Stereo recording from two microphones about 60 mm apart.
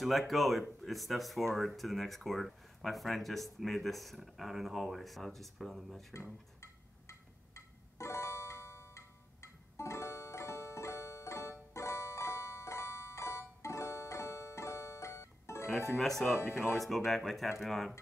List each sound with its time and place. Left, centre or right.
0.0 s speech: centre
6.6 s music: left
16.0 s speech: centre